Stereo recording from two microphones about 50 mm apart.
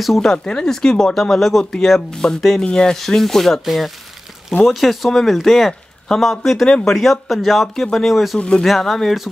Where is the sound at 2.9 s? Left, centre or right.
Centre.